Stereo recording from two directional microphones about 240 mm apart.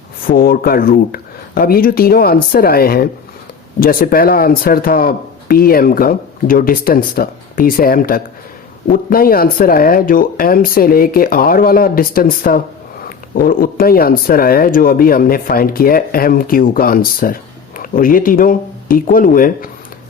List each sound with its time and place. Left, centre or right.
0.3 s speech: left